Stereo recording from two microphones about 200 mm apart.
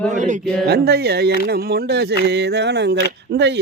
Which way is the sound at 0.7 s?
55° right (ahead or behind).